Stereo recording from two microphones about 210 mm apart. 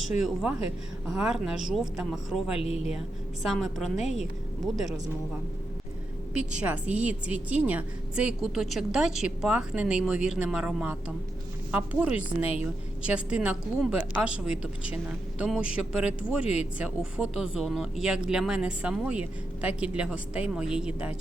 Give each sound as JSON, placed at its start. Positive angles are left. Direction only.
{"t": 0.2, "sound": "a woman's voice", "side_deg": 0}
{"t": 2.5, "sound": "speech", "side_deg": 30}
{"t": 3.4, "sound": "a woman's voice", "side_deg": 0}
{"t": 6.4, "sound": "a woman's voice", "side_deg": -5}